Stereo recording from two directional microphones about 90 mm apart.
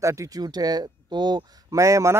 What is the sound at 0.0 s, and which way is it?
Speech, 35° right (ahead or behind).